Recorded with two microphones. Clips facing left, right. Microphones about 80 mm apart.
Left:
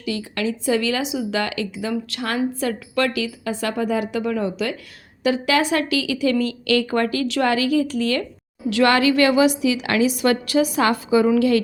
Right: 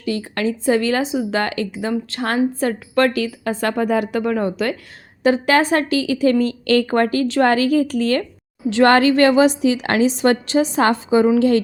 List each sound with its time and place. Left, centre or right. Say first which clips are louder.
0.0 s speech: right 3 dB; right